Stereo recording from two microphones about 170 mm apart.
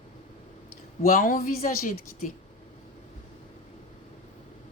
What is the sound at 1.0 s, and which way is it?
Speech, 55° left (ahead or behind).